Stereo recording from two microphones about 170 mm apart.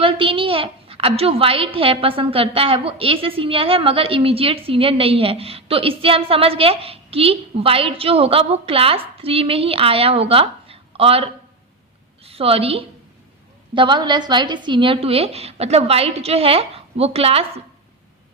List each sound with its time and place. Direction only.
0.0 s a woman's voice: 30° right (ahead or behind)